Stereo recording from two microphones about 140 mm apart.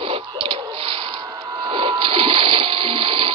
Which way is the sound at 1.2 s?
30° right (ahead or behind).